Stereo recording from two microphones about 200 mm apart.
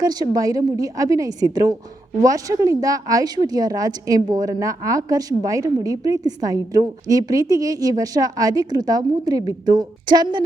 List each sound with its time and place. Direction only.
0.0 s a woman's voice: 20° right (ahead or behind)